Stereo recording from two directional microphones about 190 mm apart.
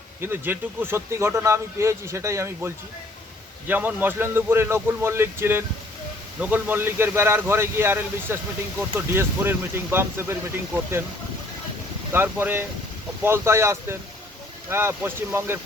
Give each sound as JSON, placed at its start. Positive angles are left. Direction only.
{"t": 0.2, "sound": "speech", "side_deg": -10}
{"t": 12.1, "sound": "speech", "side_deg": -10}